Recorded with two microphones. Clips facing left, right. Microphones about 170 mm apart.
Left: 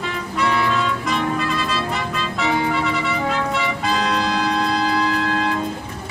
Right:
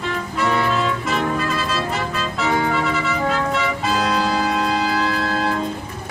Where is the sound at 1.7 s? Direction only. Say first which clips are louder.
Right 1 dB; centre (ahead or behind).